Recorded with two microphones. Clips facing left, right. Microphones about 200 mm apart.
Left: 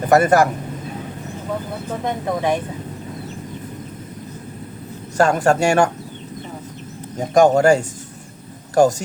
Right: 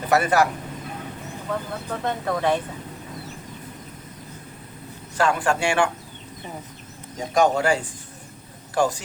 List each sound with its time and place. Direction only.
0.1 s speech: 45° left (ahead or behind)
1.9 s speech: 15° left (ahead or behind)
5.1 s speech: 45° left (ahead or behind)
7.2 s speech: 45° left (ahead or behind)